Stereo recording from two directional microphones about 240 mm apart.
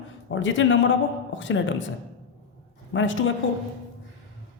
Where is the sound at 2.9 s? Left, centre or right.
Left.